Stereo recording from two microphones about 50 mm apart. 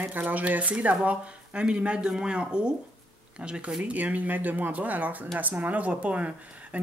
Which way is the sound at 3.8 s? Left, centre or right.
Right.